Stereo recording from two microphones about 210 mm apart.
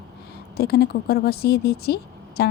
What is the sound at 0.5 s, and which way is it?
Speech, 50° left (ahead or behind).